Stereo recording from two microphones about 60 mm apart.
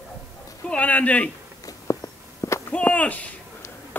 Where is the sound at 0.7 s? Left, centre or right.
Left.